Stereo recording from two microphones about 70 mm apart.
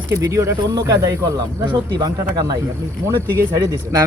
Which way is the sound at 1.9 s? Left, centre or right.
Right.